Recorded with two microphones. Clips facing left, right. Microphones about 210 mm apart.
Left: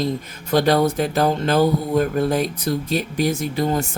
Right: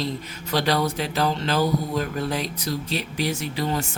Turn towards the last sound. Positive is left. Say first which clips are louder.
# left 5 dB
turn(degrees=45)  # may be behind; listen again after turning